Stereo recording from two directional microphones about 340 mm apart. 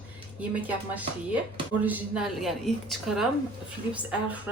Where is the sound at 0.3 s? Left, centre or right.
Centre.